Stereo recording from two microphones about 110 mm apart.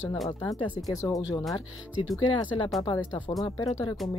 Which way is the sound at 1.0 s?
30° left (ahead or behind).